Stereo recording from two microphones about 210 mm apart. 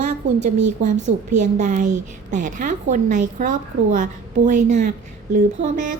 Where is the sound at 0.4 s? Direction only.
35° right (ahead or behind).